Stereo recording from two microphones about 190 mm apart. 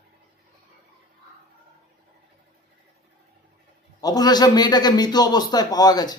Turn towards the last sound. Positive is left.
turn(degrees=20)  # may be behind; listen again after turning